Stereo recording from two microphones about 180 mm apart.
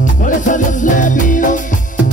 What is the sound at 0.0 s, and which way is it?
Music, 50° left (ahead or behind).